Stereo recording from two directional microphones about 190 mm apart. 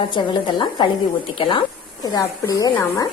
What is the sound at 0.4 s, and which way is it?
A woman's voice, 25° left (ahead or behind).